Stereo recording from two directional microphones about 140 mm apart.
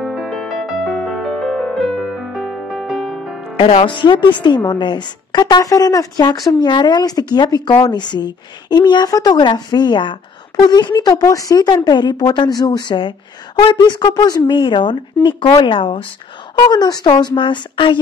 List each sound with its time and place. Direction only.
0.0 s music: 5° right (ahead or behind)
3.5 s speech: 45° left (ahead or behind)